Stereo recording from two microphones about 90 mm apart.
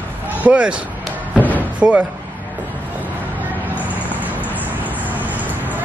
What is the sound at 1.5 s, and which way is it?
Door, 15° right (ahead or behind).